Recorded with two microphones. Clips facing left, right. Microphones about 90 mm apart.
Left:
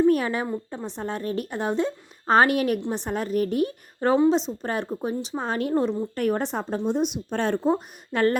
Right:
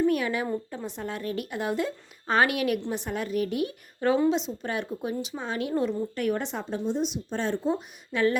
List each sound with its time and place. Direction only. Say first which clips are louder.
0.1 s a woman's voice: left 3 dB; 35° left (ahead or behind)
6.8 s speech: left 3 dB; 60° left (ahead or behind)
7.6 s speech: left 5 dB; 45° left (ahead or behind)